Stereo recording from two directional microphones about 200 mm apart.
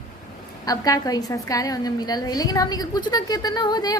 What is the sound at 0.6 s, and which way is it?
A woman's voice, 20° left (ahead or behind).